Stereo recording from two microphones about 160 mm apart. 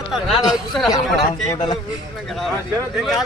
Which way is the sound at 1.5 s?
25° left (ahead or behind).